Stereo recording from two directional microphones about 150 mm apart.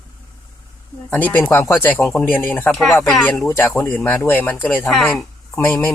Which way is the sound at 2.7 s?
Centre (ahead or behind).